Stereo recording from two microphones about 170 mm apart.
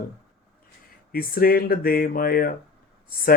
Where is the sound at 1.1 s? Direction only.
60° left (ahead or behind).